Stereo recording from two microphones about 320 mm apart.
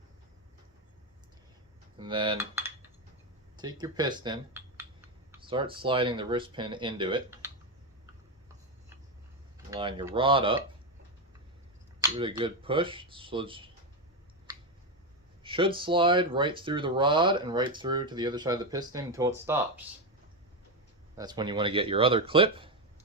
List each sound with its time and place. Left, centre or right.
2.0 s cutlery: centre
3.6 s speech: centre
9.6 s speech: centre
11.9 s speech: centre
15.4 s speech: centre
21.2 s speech: centre